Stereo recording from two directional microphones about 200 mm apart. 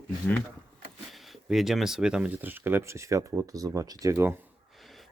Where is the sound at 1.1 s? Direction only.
Centre (ahead or behind).